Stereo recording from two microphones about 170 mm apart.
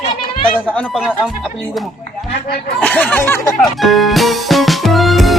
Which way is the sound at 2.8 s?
10° left (ahead or behind).